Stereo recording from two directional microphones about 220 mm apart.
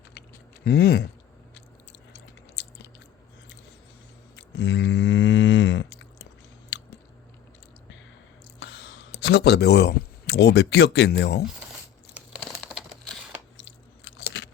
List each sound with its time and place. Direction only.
0.6 s speech: 45° left (ahead or behind)
4.4 s livestock: 55° left (ahead or behind)
8.5 s speech: 55° left (ahead or behind)
12.1 s crumpling: centre (ahead or behind)
13.6 s biting: 60° left (ahead or behind)